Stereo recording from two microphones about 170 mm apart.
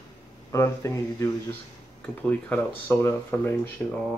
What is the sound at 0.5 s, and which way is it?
Speech, 15° left (ahead or behind).